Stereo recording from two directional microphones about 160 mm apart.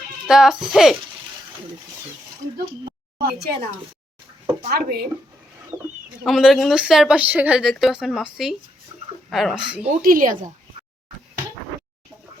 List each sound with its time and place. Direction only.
0.3 s a woman's voice: 5° right (ahead or behind)
3.2 s speech: 80° right
4.7 s speech: 75° right (ahead or behind)
5.7 s speech: 20° right (ahead or behind)
6.2 s a woman's voice: centre (ahead or behind)
10.0 s speech: 60° right (ahead or behind)